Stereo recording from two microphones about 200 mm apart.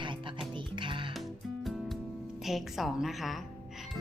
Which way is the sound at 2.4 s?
Centre (ahead or behind).